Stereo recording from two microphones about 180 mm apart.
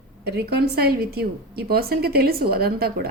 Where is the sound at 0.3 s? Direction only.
65° right (ahead or behind).